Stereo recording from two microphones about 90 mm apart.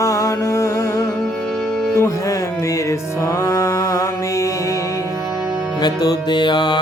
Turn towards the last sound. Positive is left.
turn(degrees=55)  # may be behind; listen again after turning